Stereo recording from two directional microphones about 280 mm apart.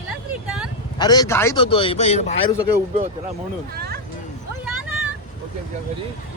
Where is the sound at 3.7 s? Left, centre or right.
Right.